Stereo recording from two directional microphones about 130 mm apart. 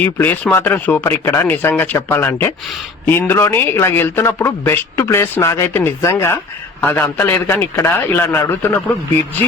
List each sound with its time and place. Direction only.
0.0 s a man's voice: 15° left (ahead or behind)